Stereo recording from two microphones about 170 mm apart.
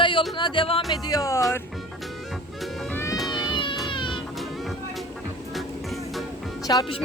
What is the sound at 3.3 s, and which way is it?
Cat, 30° left (ahead or behind).